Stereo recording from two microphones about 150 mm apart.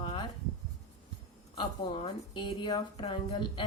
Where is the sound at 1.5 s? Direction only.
35° left (ahead or behind).